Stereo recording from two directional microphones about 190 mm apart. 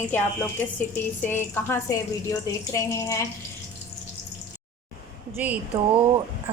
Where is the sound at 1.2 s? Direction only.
10° left (ahead or behind).